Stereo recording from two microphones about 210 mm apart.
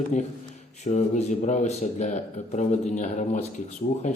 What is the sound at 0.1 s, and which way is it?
Speech, 35° left (ahead or behind).